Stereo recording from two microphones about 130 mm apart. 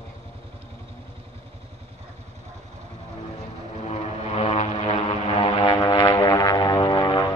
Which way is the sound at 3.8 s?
55° left (ahead or behind).